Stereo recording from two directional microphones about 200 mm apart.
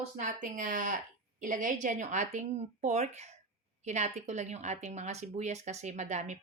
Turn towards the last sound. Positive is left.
turn(degrees=-35)  # may be behind; listen again after turning